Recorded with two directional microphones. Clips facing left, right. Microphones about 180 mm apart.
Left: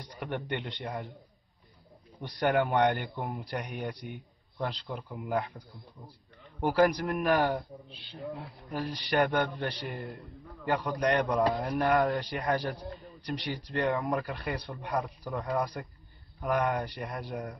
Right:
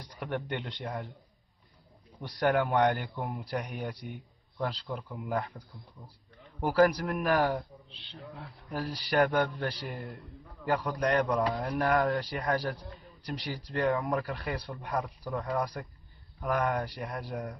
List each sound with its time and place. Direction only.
0.0 s a man's voice: centre (ahead or behind)
2.1 s speech: centre (ahead or behind)
6.6 s speech: centre (ahead or behind)
7.9 s speech: 10° left (ahead or behind)
8.7 s speech: 5° right (ahead or behind)